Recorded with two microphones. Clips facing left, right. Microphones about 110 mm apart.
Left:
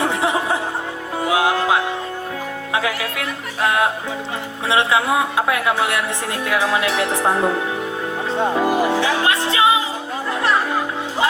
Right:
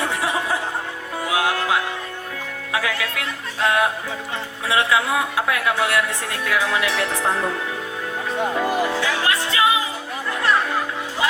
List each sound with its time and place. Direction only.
0.0 s music: 20° left (ahead or behind)
2.7 s a woman's voice: 25° left (ahead or behind)
8.3 s speech: 30° left (ahead or behind)
8.6 s music: 20° left (ahead or behind)